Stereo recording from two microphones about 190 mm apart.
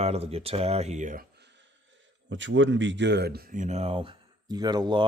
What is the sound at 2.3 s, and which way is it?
Speech, 75° right (ahead or behind).